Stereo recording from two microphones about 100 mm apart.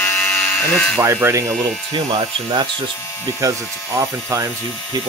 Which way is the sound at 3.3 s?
35° right (ahead or behind).